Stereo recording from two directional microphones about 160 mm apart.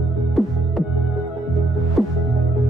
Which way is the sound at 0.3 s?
Centre (ahead or behind).